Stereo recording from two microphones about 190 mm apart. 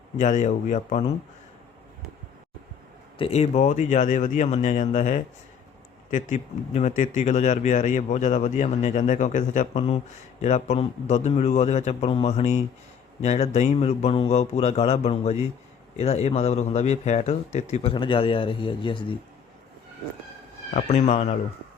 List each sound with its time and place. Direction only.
0.2 s speech: 40° left (ahead or behind)
3.2 s a man's voice: 35° left (ahead or behind)
20.7 s speech: 35° left (ahead or behind)